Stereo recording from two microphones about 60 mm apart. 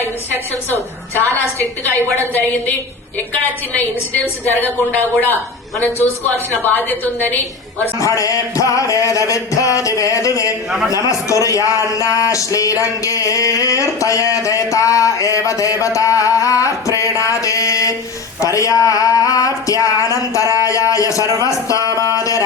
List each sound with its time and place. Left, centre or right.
1.2 s a woman's voice: left
4.4 s a woman's voice: left
7.9 s speech: left